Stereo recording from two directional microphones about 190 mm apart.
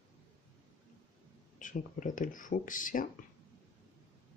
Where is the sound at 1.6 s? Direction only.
40° left (ahead or behind).